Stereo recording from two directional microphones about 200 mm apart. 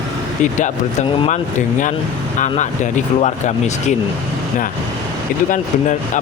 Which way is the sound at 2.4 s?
35° left (ahead or behind).